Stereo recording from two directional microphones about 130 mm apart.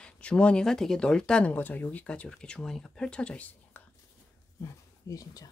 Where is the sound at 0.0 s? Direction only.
10° left (ahead or behind).